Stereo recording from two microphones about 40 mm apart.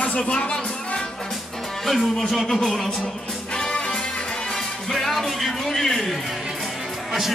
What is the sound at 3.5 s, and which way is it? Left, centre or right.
Music, left.